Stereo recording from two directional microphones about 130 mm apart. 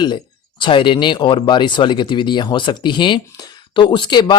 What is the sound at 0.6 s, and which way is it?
Speech, 40° left (ahead or behind).